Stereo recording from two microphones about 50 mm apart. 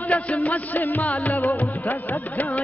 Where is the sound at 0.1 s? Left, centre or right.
Left.